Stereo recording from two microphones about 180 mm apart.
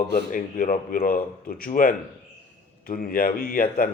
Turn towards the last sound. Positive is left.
turn(degrees=50)  # may be behind; listen again after turning